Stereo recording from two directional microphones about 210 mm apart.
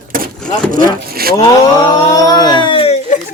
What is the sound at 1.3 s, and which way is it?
Speech, 15° left (ahead or behind).